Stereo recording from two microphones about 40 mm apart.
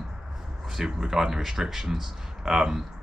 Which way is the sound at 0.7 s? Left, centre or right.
Centre.